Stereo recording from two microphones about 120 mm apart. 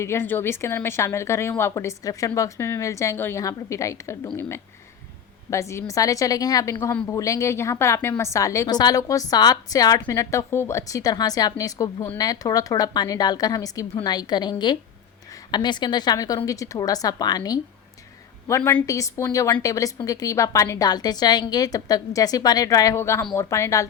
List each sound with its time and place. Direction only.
0.0 s a woman's voice: 20° left (ahead or behind)